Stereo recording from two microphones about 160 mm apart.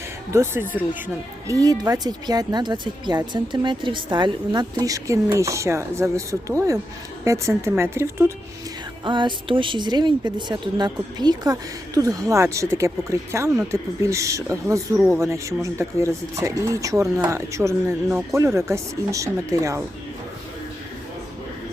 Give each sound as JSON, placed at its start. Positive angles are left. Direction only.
{"t": 0.3, "sound": "speech", "side_deg": -15}
{"t": 9.0, "sound": "speech", "side_deg": -30}